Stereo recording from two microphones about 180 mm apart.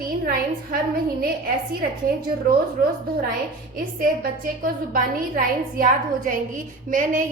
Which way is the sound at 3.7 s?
50° right (ahead or behind).